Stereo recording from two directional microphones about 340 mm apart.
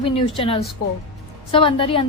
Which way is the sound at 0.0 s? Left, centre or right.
Centre.